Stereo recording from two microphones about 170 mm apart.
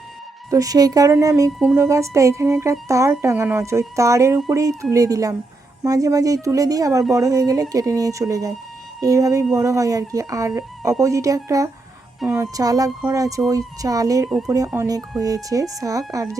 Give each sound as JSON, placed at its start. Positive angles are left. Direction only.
{"t": 0.5, "sound": "speech", "side_deg": -20}
{"t": 1.5, "sound": "speech", "side_deg": -10}
{"t": 14.3, "sound": "speech", "side_deg": 0}
{"t": 14.7, "sound": "speech", "side_deg": -15}